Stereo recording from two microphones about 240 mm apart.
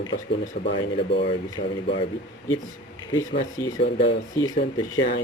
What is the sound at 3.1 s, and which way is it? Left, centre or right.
Speech, centre.